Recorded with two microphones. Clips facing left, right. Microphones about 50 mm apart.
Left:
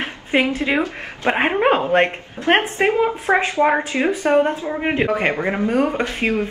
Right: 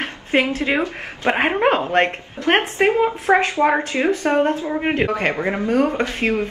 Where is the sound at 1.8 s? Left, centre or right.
Centre.